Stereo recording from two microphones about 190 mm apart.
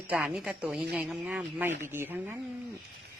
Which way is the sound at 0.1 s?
5° right (ahead or behind).